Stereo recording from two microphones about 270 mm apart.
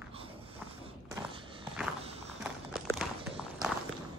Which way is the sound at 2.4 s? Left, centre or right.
Centre.